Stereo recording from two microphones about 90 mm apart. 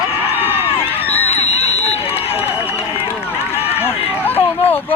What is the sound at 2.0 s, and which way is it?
Run, 90° left.